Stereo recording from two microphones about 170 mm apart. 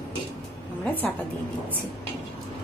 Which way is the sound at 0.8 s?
10° left (ahead or behind).